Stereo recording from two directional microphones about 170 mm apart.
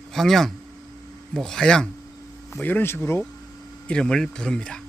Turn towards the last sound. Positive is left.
turn(degrees=5)  # may be behind; listen again after turning